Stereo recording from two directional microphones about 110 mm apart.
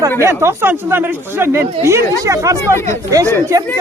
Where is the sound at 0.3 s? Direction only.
20° right (ahead or behind).